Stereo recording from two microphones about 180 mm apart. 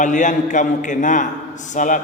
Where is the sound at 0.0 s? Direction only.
45° left (ahead or behind).